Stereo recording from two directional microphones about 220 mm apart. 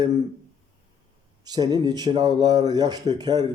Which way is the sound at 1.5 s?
20° right (ahead or behind).